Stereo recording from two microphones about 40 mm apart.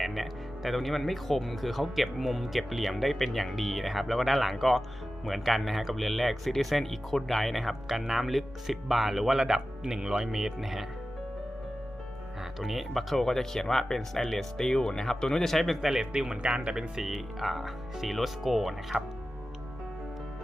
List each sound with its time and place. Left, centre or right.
0.0 s speech: centre
12.4 s speech: centre
16.0 s speech: right
17.1 s speech: centre